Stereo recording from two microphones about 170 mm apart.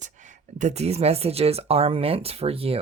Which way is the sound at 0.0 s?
45° right (ahead or behind).